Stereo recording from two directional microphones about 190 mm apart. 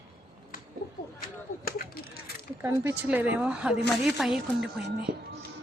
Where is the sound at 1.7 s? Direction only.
50° left (ahead or behind).